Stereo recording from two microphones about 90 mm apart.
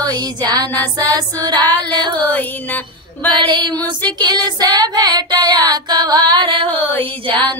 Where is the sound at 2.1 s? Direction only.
20° left (ahead or behind).